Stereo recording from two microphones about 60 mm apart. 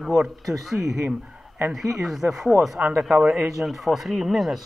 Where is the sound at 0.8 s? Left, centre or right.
Right.